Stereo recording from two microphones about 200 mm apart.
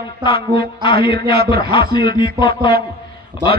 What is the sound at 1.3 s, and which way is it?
Speech, 50° right (ahead or behind).